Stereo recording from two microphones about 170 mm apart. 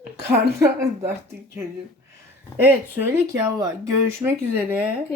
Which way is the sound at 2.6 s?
10° right (ahead or behind).